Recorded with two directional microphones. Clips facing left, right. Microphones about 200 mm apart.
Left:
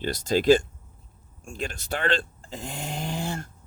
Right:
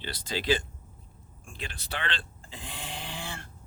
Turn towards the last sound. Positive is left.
turn(degrees=45)  # may be behind; listen again after turning